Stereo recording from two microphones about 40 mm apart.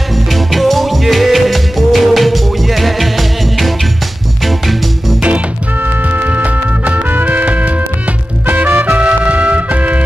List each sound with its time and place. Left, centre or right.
0.3 s music: centre
5.8 s music: right
7.1 s music: right
7.4 s music: right
8.9 s music: right